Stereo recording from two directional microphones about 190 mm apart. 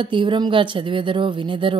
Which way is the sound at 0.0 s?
25° right (ahead or behind).